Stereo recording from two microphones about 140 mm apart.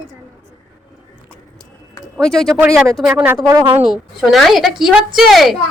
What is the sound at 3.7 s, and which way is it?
A woman's voice, 10° right (ahead or behind).